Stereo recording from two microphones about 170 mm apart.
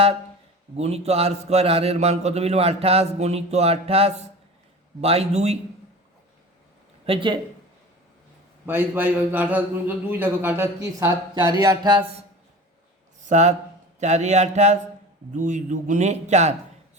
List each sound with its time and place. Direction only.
0.8 s a man's voice: 40° right (ahead or behind)
7.0 s speech: 30° right (ahead or behind)
8.6 s a man's voice: 10° right (ahead or behind)
11.5 s a sound: 25° right (ahead or behind)
13.2 s a man's voice: 45° right (ahead or behind)